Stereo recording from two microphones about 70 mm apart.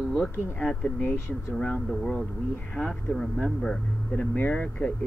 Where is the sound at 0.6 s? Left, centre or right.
Centre.